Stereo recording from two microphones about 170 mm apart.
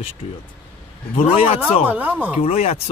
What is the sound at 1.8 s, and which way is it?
Speech, 10° right (ahead or behind).